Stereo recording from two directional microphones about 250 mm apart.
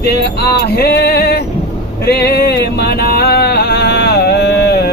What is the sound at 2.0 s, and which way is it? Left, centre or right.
Music, left.